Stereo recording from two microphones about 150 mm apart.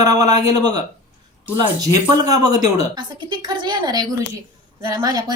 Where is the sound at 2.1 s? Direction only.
25° right (ahead or behind).